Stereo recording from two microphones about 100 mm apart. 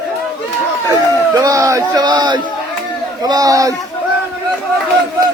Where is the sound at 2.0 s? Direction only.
45° right (ahead or behind).